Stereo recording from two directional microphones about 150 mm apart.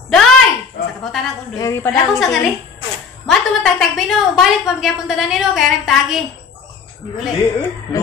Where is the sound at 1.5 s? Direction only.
20° left (ahead or behind).